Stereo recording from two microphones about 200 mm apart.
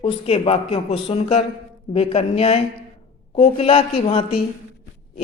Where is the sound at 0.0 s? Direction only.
25° left (ahead or behind).